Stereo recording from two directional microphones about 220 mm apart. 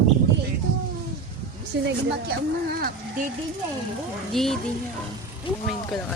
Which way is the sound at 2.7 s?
45° right (ahead or behind).